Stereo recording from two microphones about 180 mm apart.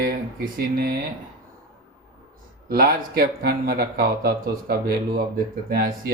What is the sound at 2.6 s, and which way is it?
Speech, 55° right (ahead or behind).